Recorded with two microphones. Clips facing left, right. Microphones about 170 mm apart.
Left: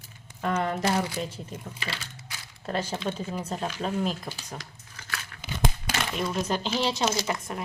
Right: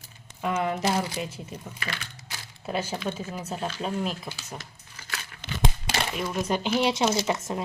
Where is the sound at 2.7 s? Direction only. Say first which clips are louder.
Even; 5° right (ahead or behind).